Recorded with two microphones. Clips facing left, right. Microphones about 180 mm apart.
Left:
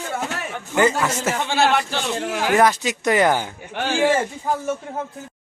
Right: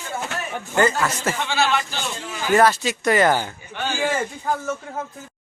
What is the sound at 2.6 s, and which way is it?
Speech, 15° left (ahead or behind).